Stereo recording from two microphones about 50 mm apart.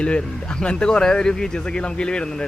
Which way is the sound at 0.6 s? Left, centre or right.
Centre.